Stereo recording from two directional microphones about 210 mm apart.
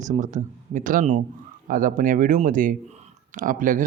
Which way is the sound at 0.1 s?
35° right (ahead or behind).